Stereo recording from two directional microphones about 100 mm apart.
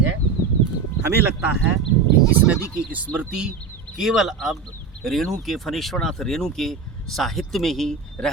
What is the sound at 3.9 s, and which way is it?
Speech, 5° right (ahead or behind).